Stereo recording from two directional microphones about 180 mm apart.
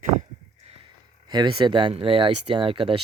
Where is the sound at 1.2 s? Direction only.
25° right (ahead or behind).